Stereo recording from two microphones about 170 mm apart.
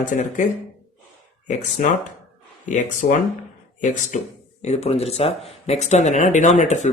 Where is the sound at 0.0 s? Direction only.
50° left (ahead or behind).